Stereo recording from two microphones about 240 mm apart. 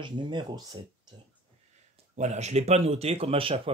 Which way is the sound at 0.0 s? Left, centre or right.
Centre.